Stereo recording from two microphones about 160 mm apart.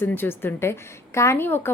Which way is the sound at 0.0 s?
15° left (ahead or behind).